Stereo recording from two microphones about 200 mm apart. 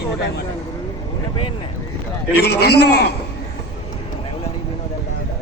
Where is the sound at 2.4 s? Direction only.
50° left (ahead or behind).